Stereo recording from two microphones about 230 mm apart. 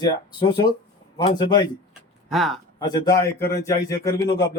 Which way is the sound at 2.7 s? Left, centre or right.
Centre.